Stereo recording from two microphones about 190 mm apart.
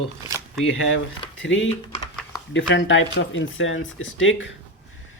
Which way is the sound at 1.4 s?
80° left.